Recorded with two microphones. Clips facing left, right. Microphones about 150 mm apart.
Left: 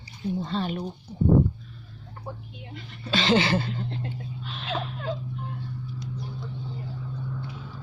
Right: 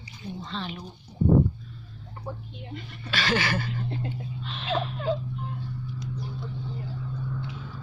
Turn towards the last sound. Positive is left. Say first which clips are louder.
# right 1 dB
turn(degrees=5)  # may be behind; listen again after turning